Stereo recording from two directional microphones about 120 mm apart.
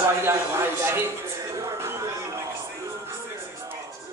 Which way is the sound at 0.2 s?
20° right (ahead or behind).